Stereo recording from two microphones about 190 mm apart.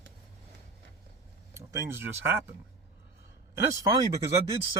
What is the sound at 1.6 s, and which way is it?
Speech, 15° right (ahead or behind).